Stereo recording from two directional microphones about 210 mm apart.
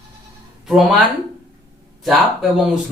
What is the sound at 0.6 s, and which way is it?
Speech, centre (ahead or behind).